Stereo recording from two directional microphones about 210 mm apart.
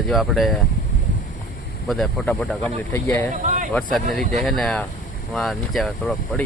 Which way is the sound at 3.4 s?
35° right (ahead or behind).